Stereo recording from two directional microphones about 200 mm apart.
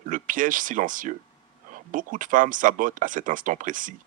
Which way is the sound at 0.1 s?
40° right (ahead or behind).